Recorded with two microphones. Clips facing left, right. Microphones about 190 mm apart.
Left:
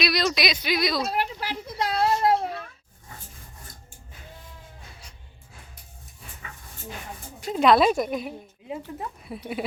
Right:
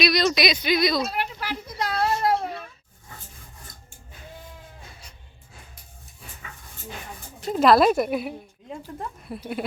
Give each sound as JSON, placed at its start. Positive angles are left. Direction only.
{"t": 0.0, "sound": "speech", "side_deg": 0}
{"t": 1.0, "sound": "children playing", "side_deg": 35}
{"t": 7.4, "sound": "speech", "side_deg": 0}